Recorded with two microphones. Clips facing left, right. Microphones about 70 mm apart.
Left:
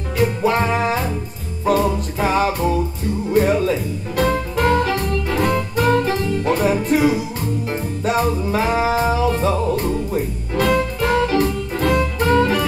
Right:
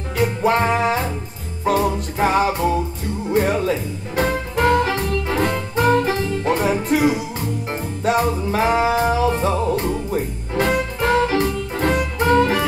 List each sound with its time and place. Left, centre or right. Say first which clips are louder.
0.4 s music: right 4 dB; right